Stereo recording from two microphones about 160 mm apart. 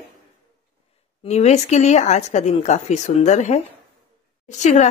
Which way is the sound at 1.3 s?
45° left (ahead or behind).